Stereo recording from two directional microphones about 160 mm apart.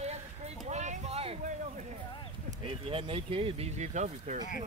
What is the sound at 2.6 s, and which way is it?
Speech, 35° right (ahead or behind).